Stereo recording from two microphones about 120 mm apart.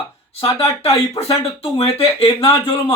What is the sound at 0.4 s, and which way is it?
Speech, 55° left (ahead or behind).